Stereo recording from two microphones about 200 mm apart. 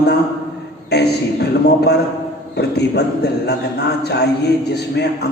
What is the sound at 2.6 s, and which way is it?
A man's voice, 55° left (ahead or behind).